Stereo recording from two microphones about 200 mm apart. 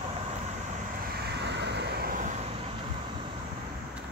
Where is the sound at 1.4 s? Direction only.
60° right (ahead or behind).